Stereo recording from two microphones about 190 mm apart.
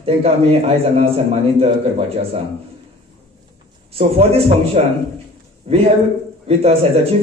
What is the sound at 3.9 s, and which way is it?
A man's voice, 30° right (ahead or behind).